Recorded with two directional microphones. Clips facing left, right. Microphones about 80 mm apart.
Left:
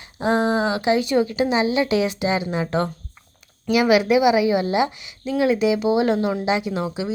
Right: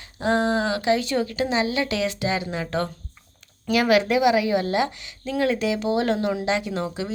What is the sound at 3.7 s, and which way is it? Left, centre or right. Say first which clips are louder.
A woman's voice: left 3 dB; centre.